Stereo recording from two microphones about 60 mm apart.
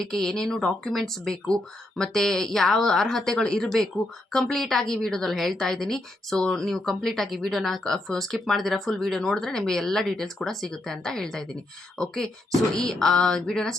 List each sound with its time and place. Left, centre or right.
0.0 s a woman's voice: centre